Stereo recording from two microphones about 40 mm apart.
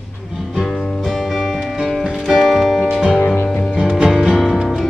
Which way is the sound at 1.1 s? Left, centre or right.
Centre.